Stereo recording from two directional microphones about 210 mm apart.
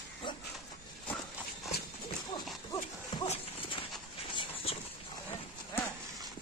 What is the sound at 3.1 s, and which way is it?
Horse, 20° left (ahead or behind).